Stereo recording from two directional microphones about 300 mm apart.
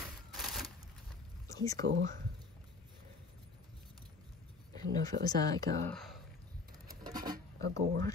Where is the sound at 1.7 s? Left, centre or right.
Right.